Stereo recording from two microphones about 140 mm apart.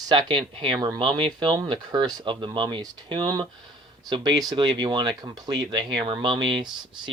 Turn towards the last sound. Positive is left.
turn(degrees=-35)  # may be behind; listen again after turning